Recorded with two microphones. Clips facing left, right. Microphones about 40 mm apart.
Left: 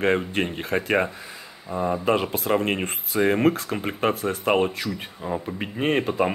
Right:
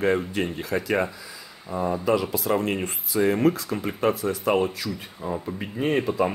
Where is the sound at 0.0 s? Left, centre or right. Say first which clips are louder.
Left 1 dB; left.